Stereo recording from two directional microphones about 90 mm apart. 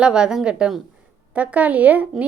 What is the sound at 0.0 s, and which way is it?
Speech, 10° right (ahead or behind).